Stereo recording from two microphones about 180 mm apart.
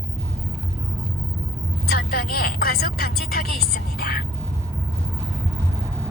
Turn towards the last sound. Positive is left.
turn(degrees=60)  # may be behind; listen again after turning